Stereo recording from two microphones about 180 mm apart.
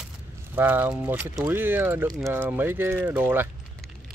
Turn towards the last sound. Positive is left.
turn(degrees=-10)  # may be behind; listen again after turning